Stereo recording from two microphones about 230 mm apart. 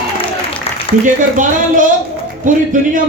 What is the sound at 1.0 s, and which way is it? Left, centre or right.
Speech, right.